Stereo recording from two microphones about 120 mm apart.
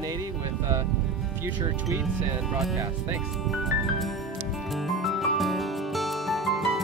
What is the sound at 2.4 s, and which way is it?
Speech, centre (ahead or behind).